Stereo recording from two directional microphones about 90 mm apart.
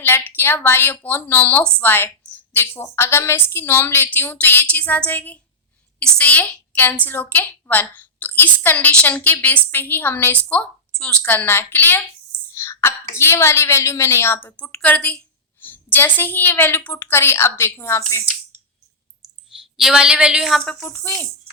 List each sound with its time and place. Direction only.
0.0 s a woman's voice: 25° left (ahead or behind)
19.5 s a woman's voice: 5° right (ahead or behind)
20.8 s speech: 15° left (ahead or behind)